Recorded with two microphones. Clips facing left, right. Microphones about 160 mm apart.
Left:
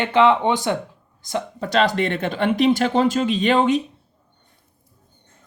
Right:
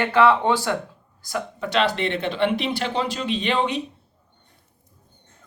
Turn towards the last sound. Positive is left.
turn(degrees=45)  # may be behind; listen again after turning